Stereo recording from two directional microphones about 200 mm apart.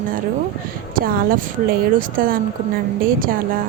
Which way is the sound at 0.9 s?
45° right (ahead or behind).